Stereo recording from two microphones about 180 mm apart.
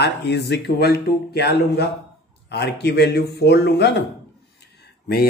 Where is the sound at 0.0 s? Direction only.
70° left (ahead or behind).